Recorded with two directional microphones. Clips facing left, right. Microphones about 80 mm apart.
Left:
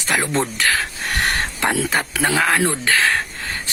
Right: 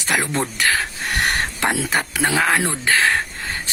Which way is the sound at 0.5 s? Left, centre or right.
Right.